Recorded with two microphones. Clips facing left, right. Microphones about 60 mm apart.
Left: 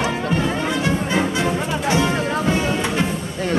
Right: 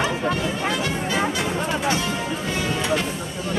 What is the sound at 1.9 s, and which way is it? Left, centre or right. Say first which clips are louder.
Music: left 5 dB; left.